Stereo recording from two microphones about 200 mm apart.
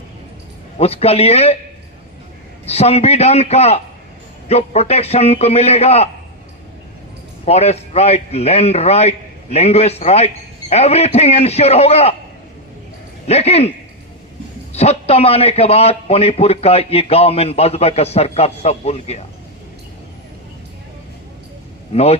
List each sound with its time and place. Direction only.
0.8 s a man's voice: 30° left (ahead or behind)
2.6 s a man's voice: 30° left (ahead or behind)
7.4 s a man's voice: 30° left (ahead or behind)
13.2 s a man's voice: 30° left (ahead or behind)
21.9 s a man's voice: 30° left (ahead or behind)